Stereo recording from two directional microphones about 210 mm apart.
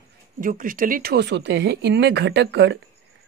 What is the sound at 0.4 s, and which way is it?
Speech, 40° right (ahead or behind).